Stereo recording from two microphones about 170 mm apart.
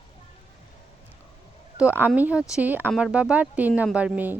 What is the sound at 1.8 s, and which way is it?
Speech, 10° right (ahead or behind).